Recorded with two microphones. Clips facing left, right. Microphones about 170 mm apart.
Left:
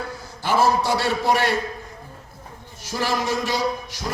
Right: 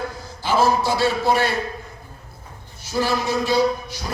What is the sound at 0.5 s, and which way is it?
A man's voice, 75° left (ahead or behind).